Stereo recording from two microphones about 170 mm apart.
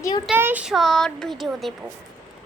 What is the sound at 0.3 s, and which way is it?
Speech, 10° right (ahead or behind).